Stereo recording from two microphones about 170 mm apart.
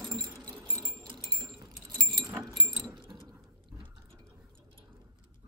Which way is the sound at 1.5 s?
Centre (ahead or behind).